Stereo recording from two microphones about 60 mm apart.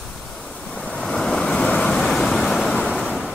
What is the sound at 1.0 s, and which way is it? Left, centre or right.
Waves, centre.